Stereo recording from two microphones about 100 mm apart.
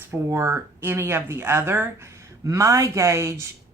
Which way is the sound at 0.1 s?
30° right (ahead or behind).